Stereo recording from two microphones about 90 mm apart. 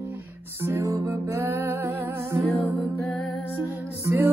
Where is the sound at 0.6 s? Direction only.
30° right (ahead or behind).